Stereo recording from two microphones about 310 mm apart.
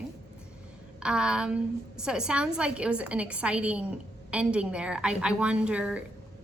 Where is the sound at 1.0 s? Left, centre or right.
Centre.